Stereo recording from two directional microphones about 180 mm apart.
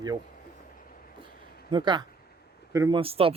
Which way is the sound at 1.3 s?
55° left (ahead or behind).